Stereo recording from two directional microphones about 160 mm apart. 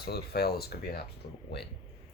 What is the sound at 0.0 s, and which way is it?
Speech, 85° left.